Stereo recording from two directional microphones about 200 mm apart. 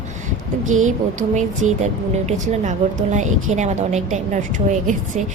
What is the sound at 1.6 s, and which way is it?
A woman's voice, 35° right (ahead or behind).